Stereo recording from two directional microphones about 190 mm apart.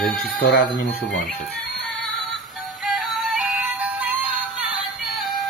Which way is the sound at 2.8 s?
Centre (ahead or behind).